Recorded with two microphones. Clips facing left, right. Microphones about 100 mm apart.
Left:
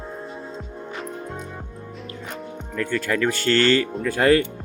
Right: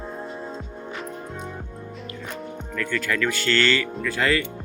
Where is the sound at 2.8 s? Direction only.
30° left (ahead or behind); by 4.4 s 45° left (ahead or behind).